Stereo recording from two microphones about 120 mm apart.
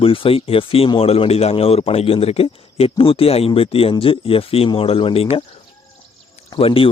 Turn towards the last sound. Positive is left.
turn(degrees=50)  # may be behind; listen again after turning